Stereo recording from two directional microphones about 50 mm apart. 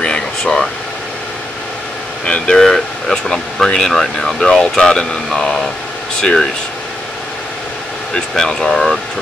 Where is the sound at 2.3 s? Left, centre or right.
Left.